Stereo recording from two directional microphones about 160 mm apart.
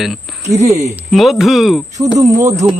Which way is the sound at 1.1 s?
Centre (ahead or behind).